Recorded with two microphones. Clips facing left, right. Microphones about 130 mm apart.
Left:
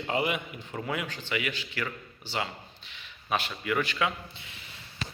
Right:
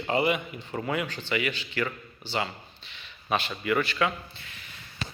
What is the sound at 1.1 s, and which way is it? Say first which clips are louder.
A man's voice: right 3 dB; 10° left (ahead or behind).